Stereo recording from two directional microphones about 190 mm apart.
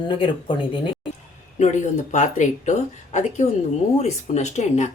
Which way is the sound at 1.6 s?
40° left (ahead or behind).